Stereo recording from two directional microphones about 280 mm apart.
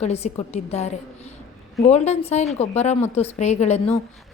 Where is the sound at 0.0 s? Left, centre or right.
Left.